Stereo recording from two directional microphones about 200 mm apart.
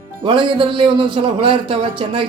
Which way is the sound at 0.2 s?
25° right (ahead or behind).